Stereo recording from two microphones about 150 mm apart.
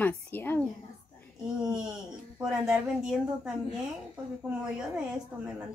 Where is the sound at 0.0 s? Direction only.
15° left (ahead or behind).